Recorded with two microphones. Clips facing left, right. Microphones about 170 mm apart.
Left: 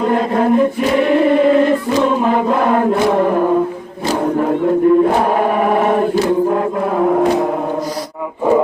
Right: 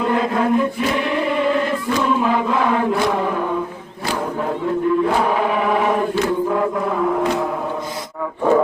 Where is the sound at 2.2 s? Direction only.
45° left (ahead or behind).